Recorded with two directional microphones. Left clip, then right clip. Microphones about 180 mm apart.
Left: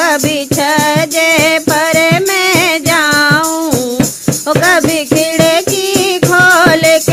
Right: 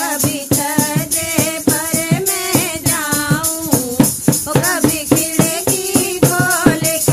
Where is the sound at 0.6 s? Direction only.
25° left (ahead or behind).